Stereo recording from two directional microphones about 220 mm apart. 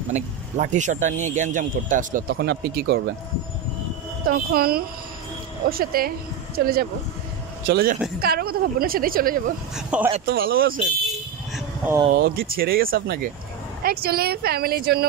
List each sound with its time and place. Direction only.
0.1 s speech: 35° right (ahead or behind)
4.3 s a woman's voice: 45° right (ahead or behind)
9.8 s a man's voice: 5° right (ahead or behind)
10.2 s a woman's voice: 40° right (ahead or behind)
11.5 s sheep: 10° right (ahead or behind)
12.2 s a woman's voice: 40° right (ahead or behind)